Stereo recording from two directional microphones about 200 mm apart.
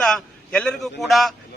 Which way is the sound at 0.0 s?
5° left (ahead or behind).